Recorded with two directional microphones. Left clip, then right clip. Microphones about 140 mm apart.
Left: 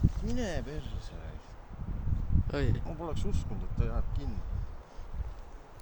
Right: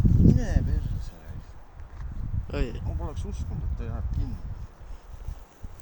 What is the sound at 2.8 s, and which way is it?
Speech, 15° left (ahead or behind).